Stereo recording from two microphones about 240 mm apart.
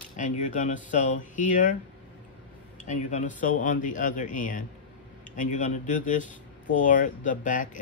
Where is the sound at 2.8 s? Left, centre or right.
Left.